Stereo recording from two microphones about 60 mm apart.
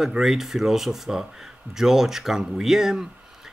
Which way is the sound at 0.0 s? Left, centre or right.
Centre.